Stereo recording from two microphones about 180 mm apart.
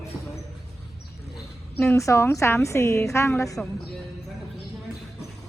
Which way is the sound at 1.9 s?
15° left (ahead or behind).